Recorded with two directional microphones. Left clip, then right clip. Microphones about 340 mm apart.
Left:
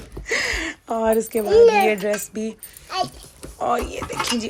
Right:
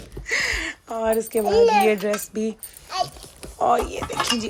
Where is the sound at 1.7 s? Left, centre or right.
Centre.